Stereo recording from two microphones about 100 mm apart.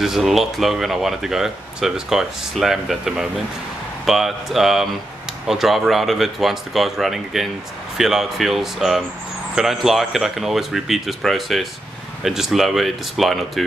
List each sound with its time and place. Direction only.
0.0 s speech: 5° right (ahead or behind)